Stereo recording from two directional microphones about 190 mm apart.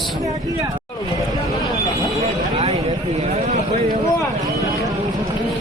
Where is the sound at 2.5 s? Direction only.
35° right (ahead or behind).